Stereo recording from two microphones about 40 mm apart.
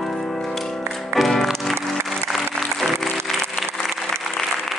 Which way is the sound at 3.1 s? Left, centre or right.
Centre.